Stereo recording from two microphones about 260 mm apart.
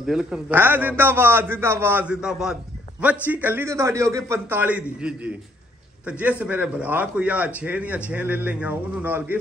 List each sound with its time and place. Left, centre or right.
0.0 s a man's voice: centre